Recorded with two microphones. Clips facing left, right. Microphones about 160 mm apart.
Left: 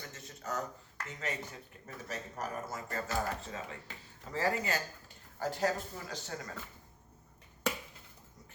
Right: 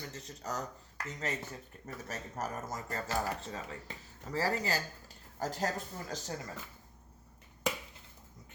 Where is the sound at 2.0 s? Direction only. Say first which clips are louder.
Even; 45° right (ahead or behind).